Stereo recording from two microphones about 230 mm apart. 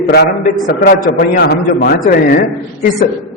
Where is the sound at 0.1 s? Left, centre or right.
Left.